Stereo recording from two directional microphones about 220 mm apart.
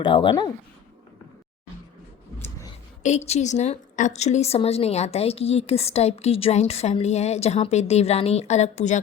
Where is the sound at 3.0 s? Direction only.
30° left (ahead or behind).